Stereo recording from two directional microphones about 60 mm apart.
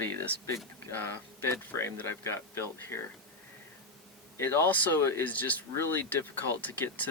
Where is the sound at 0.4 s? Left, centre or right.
Left.